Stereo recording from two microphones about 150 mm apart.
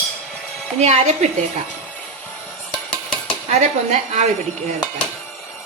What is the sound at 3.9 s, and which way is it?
Speech, 50° right (ahead or behind).